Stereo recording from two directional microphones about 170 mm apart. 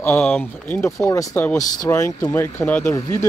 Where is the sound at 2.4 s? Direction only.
10° left (ahead or behind).